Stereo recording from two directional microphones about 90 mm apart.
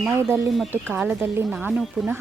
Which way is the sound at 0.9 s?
10° right (ahead or behind).